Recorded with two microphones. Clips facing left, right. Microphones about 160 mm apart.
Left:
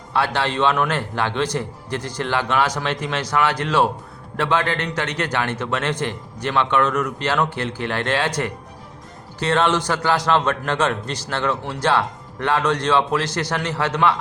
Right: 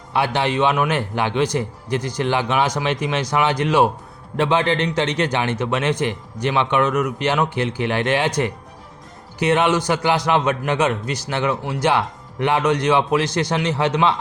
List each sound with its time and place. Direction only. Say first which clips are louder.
0.1 s a man's voice: right 2 dB; 15° right (ahead or behind)